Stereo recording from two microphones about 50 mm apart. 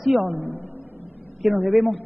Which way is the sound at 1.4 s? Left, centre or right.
Centre.